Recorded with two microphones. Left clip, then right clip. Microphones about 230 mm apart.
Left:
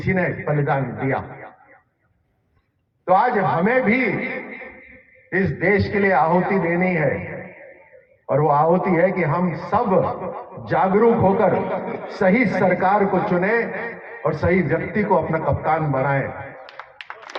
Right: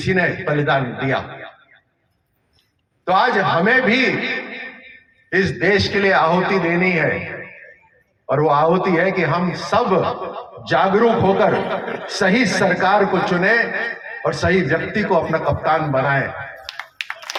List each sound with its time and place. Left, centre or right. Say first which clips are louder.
0.0 s a man's voice: right 4 dB; right
3.0 s a man's voice: right 1 dB; right